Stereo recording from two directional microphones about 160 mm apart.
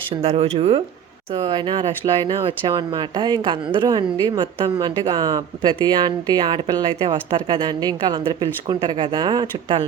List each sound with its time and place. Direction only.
0.2 s speech: 40° right (ahead or behind)